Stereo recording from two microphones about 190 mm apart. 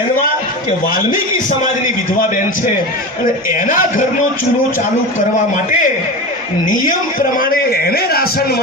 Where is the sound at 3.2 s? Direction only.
45° left (ahead or behind).